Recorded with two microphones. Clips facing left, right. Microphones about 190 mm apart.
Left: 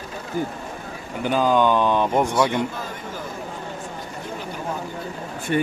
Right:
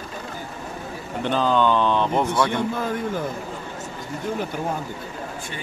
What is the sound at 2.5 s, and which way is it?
Speech, 55° right (ahead or behind).